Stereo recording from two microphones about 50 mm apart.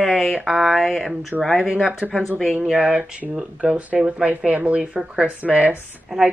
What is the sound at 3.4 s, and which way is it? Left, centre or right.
Speech, right.